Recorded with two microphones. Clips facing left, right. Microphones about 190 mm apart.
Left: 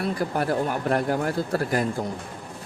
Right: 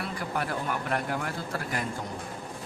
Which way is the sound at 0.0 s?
35° left (ahead or behind).